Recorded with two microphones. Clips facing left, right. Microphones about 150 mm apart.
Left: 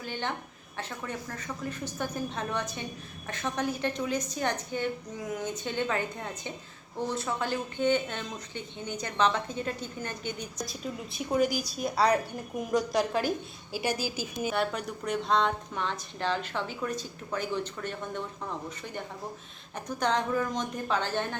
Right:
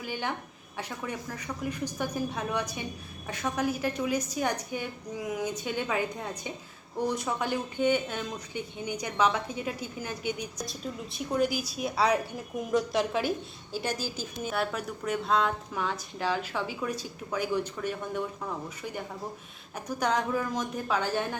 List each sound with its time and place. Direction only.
0.0 s speech: 10° right (ahead or behind)
10.7 s a woman's voice: centre (ahead or behind)